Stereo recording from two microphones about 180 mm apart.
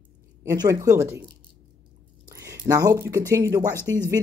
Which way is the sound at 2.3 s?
15° right (ahead or behind).